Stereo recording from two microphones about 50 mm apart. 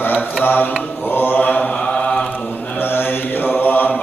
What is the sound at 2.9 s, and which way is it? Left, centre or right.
Mantra, left.